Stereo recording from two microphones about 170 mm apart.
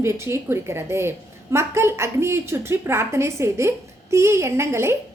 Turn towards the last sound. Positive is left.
turn(degrees=-15)  # may be behind; listen again after turning